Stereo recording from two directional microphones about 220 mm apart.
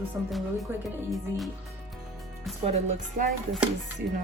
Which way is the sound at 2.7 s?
30° right (ahead or behind).